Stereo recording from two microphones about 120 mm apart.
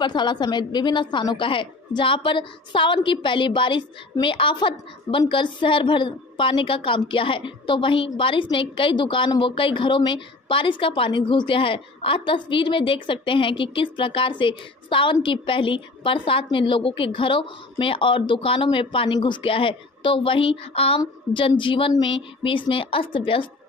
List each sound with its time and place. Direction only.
0.0 s a woman's voice: 40° left (ahead or behind)